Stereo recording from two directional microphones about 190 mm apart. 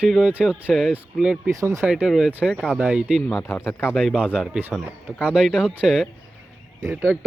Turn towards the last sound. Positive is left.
turn(degrees=5)  # may be behind; listen again after turning